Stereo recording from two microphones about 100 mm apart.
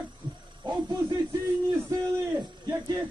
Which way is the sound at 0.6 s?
45° right (ahead or behind).